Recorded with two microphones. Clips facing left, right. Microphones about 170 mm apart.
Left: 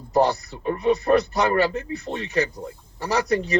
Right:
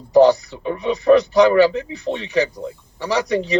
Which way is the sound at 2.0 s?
75° right (ahead or behind).